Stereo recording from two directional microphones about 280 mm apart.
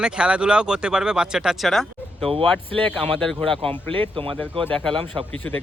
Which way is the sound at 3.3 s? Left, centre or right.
Centre.